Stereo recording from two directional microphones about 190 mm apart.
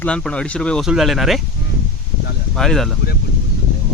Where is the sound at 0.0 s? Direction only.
5° left (ahead or behind).